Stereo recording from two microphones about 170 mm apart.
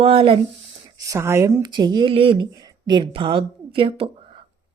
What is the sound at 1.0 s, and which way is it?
Speech, 15° right (ahead or behind).